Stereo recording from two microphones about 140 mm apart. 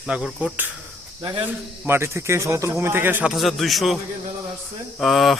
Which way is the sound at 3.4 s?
Centre (ahead or behind).